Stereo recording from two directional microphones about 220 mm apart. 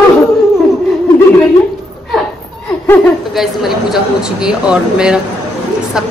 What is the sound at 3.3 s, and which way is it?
A woman's voice, centre (ahead or behind).